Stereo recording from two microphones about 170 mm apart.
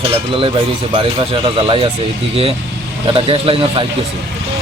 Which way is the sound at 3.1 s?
30° right (ahead or behind).